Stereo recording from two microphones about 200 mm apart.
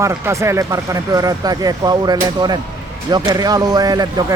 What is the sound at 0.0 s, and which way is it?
Speech, 15° right (ahead or behind).